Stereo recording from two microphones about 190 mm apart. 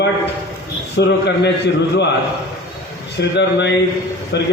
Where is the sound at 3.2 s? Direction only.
65° left (ahead or behind).